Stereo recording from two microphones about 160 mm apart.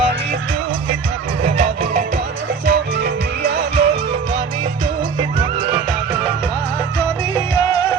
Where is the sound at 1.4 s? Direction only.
55° right (ahead or behind).